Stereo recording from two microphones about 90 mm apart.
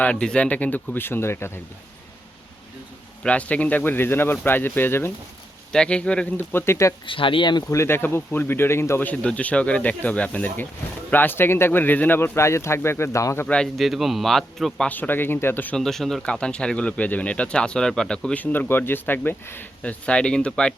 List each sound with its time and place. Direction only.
0.0 s speech: 10° left (ahead or behind); by 1.5 s 30° left (ahead or behind)
3.2 s speech: 15° left (ahead or behind)
5.7 s speech: 10° left (ahead or behind)
6.5 s speech: 25° left (ahead or behind)
7.0 s speech: 70° left (ahead or behind)
7.7 s speech: 30° left (ahead or behind)
13.7 s a man's voice: centre (ahead or behind)
14.8 s speech: 20° left (ahead or behind)
15.7 s speech: 5° left (ahead or behind)